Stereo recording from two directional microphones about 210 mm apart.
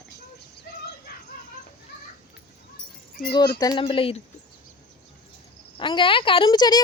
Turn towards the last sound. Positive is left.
turn(degrees=20)  # may be behind; listen again after turning